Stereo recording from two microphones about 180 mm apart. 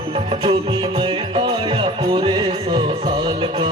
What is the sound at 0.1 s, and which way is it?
Music, 30° right (ahead or behind).